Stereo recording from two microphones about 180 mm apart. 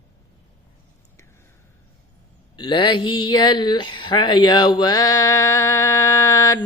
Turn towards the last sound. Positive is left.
turn(degrees=15)  # may be behind; listen again after turning